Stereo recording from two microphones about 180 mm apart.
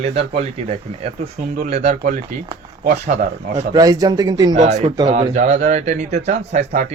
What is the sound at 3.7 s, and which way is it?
Speech, 20° right (ahead or behind).